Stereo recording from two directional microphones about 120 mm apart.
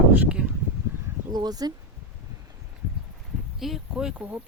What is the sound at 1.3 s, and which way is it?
Speech, 35° right (ahead or behind).